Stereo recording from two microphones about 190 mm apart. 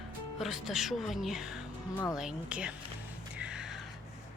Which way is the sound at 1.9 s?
15° left (ahead or behind).